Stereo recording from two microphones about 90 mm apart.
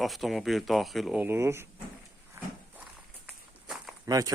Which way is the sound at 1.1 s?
20° right (ahead or behind).